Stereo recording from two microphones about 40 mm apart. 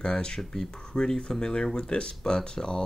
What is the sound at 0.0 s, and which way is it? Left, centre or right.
Speech, left.